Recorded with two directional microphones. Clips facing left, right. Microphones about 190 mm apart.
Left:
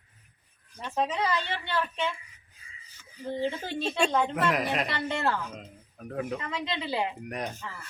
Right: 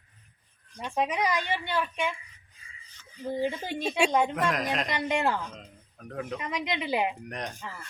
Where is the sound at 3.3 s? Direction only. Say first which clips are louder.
Right 1 dB; 10° right (ahead or behind).